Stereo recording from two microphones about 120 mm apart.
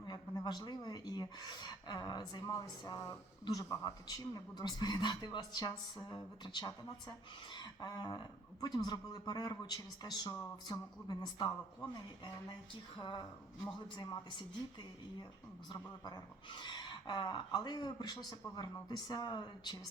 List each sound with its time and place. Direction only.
0.0 s a woman's voice: 35° left (ahead or behind)
15.7 s a woman's voice: 40° left (ahead or behind)